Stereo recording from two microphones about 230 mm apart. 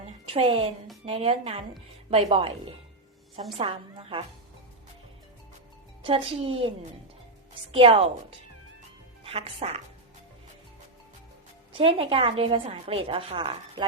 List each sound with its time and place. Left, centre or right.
0.3 s a woman's voice: right
6.0 s a woman's voice: right
9.2 s speech: right
11.7 s a woman's voice: right